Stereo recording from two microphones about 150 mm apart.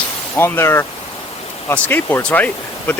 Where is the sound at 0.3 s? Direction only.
15° left (ahead or behind).